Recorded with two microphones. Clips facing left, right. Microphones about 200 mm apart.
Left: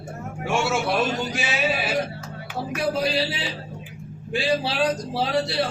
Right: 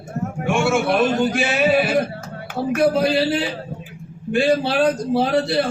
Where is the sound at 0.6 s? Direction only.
55° right (ahead or behind).